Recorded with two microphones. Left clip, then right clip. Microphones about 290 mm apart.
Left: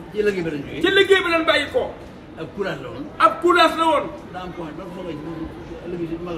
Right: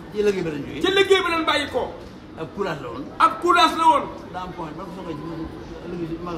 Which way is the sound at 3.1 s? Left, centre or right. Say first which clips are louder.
Left 2 dB; centre.